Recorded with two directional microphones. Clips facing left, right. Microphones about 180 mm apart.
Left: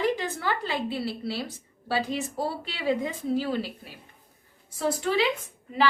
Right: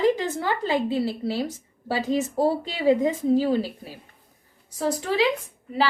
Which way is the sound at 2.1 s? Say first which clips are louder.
Right 8 dB; 45° right (ahead or behind).